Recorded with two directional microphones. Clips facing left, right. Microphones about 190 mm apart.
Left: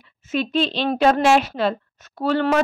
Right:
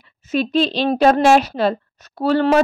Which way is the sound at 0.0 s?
35° right (ahead or behind).